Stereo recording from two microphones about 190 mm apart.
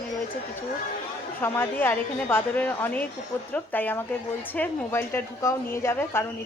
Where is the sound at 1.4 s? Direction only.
10° left (ahead or behind).